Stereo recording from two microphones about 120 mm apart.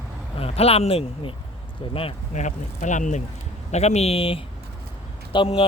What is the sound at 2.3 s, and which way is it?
Speech, 90° left.